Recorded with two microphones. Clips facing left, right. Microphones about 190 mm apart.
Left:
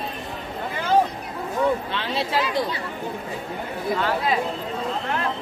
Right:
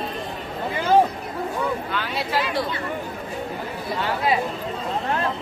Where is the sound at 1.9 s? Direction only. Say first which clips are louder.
Left 1 dB; 25° left (ahead or behind).